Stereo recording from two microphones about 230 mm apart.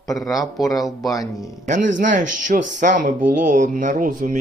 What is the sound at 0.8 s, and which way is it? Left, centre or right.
Speech, centre.